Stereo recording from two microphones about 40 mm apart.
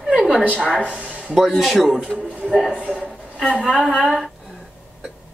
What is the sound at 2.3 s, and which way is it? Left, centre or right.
A woman's voice, right.